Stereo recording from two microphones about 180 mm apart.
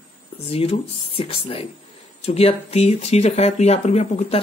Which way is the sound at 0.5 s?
35° left (ahead or behind).